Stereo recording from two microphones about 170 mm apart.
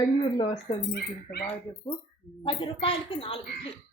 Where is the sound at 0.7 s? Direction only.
35° left (ahead or behind).